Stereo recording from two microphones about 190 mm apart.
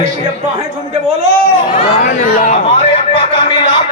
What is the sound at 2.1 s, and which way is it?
Speech, 45° left (ahead or behind).